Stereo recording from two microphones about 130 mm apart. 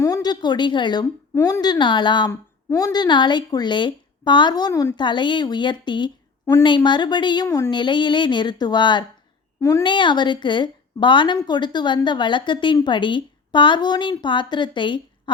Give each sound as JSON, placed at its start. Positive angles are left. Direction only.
{"t": 0.0, "sound": "a woman's voice", "side_deg": 30}
{"t": 1.4, "sound": "speech", "side_deg": 20}
{"t": 1.6, "sound": "a woman's voice", "side_deg": 35}
{"t": 2.3, "sound": "a woman's voice", "side_deg": 25}
{"t": 4.9, "sound": "a woman's voice", "side_deg": 35}
{"t": 7.4, "sound": "speech", "side_deg": 20}
{"t": 7.7, "sound": "a woman's voice", "side_deg": 35}
{"t": 9.6, "sound": "a woman's voice", "side_deg": 20}
{"t": 9.8, "sound": "a woman's voice", "side_deg": 35}